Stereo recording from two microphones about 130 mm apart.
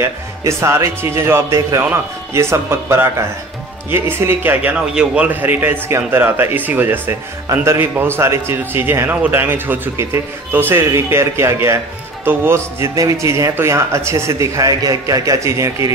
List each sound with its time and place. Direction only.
0.4 s a man's voice: 20° right (ahead or behind)